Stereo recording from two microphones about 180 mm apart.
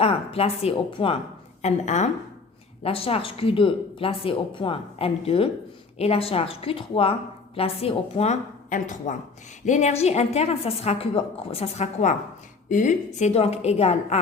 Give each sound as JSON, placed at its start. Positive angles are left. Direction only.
{"t": 0.0, "sound": "a woman's voice", "side_deg": 30}